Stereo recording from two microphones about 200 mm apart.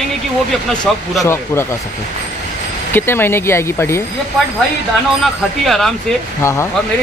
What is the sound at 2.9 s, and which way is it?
Speech, 10° left (ahead or behind).